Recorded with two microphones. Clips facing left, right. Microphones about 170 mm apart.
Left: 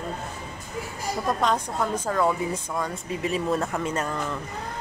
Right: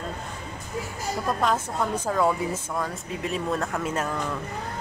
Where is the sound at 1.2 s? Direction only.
5° right (ahead or behind).